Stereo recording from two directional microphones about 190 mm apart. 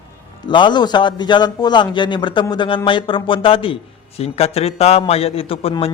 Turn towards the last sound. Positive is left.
turn(degrees=30)  # may be behind; listen again after turning